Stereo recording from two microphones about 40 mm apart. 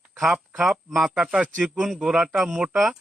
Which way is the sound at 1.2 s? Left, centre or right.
Right.